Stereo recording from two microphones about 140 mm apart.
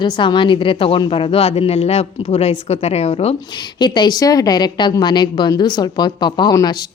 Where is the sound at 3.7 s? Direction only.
30° left (ahead or behind).